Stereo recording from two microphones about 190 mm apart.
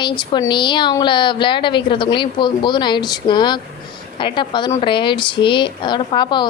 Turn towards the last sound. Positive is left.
turn(degrees=25)  # may be behind; listen again after turning